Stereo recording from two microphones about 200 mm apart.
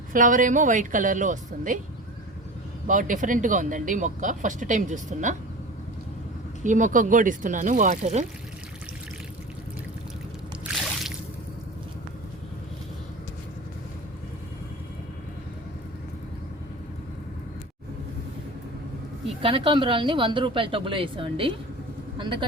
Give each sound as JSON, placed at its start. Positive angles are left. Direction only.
{"t": 0.1, "sound": "speech", "side_deg": -40}
{"t": 2.8, "sound": "speech", "side_deg": -40}
{"t": 6.7, "sound": "speech", "side_deg": -40}
{"t": 19.4, "sound": "a woman's voice", "side_deg": -25}